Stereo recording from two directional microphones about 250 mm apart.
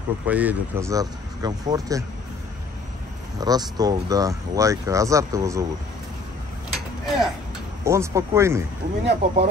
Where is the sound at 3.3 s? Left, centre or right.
Centre.